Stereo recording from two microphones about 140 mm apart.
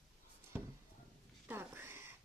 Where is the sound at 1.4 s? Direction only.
15° right (ahead or behind).